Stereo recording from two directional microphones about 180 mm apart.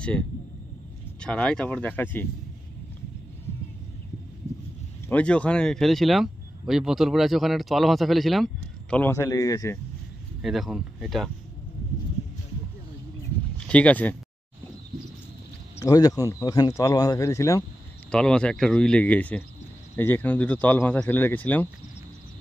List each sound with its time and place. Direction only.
1.2 s speech: 5° left (ahead or behind)
5.0 s speech: 5° left (ahead or behind)
8.9 s speech: 15° left (ahead or behind)
10.4 s speech: centre (ahead or behind)
13.7 s speech: 5° left (ahead or behind)
15.8 s speech: 20° left (ahead or behind)
18.1 s speech: 5° left (ahead or behind)